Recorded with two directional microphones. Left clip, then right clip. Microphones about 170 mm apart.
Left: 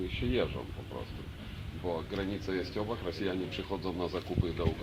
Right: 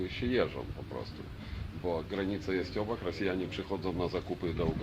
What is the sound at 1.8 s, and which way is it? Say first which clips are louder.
A man's voice: right 1 dB; 10° right (ahead or behind).